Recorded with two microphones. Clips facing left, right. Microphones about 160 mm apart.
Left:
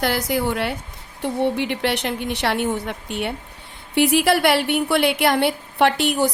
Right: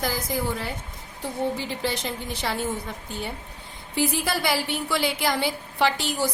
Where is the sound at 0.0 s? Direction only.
75° left (ahead or behind).